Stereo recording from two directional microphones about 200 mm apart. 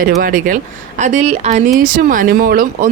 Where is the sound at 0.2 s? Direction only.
40° right (ahead or behind).